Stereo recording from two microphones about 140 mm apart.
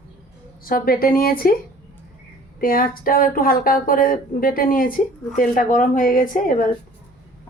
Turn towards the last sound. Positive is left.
turn(degrees=75)  # may be behind; listen again after turning